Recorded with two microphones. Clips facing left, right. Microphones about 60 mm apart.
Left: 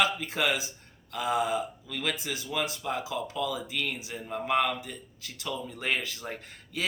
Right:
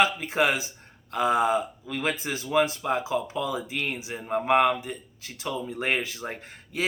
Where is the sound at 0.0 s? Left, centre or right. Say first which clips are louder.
Right 4 dB; right.